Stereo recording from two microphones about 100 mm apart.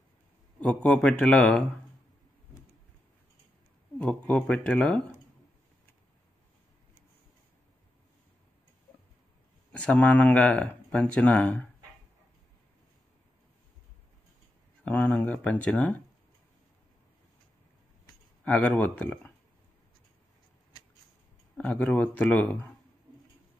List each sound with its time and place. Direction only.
0.6 s speech: 10° left (ahead or behind)
4.0 s speech: 10° left (ahead or behind)
9.7 s speech: 10° left (ahead or behind)
14.9 s speech: 15° left (ahead or behind)
18.4 s speech: 15° left (ahead or behind)
21.5 s speech: 15° left (ahead or behind)